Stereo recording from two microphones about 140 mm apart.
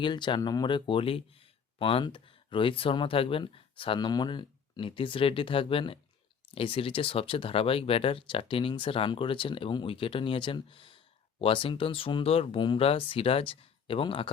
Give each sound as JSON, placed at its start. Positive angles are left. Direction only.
{"t": 0.0, "sound": "speech", "side_deg": 35}